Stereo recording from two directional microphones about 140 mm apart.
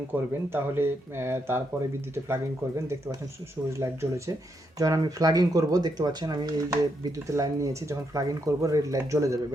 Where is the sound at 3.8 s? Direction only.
20° right (ahead or behind).